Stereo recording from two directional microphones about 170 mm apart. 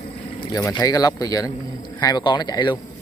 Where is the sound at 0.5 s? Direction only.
20° left (ahead or behind).